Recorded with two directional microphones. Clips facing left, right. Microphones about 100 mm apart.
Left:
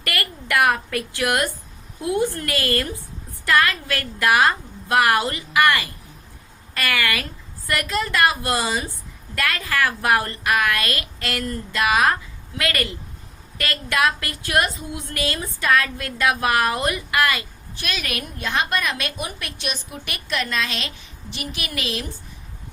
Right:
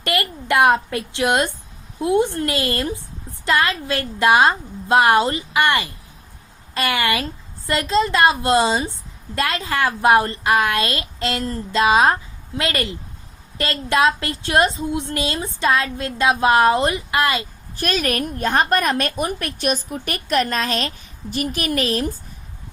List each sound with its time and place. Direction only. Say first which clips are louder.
0.0 s a woman's voice: right 6 dB; 25° right (ahead or behind)
17.7 s a woman's voice: right 8 dB; 40° right (ahead or behind)